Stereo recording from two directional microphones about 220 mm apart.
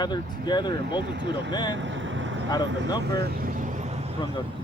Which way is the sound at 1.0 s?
50° right (ahead or behind).